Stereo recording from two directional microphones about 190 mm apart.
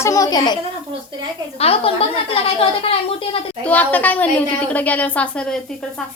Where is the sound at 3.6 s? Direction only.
10° left (ahead or behind).